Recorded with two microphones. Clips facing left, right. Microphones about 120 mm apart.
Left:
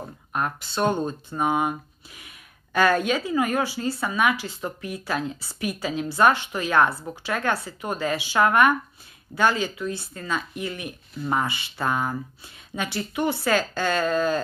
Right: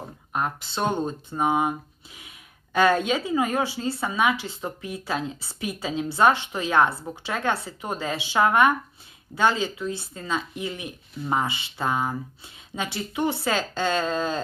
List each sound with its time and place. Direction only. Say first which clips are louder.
0.3 s speech: even; 20° right (ahead or behind)